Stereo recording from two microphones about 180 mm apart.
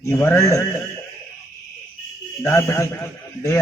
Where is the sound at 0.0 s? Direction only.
15° left (ahead or behind).